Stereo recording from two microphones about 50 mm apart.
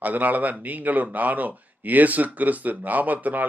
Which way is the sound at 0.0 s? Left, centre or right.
Right.